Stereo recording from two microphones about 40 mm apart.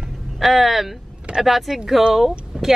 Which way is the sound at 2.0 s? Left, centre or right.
Centre.